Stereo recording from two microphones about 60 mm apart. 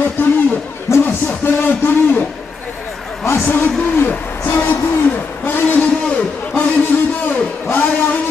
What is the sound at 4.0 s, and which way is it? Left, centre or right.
Hoot, left.